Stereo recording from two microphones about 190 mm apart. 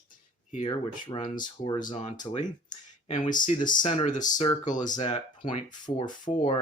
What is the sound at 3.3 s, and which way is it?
Speech, 45° left (ahead or behind).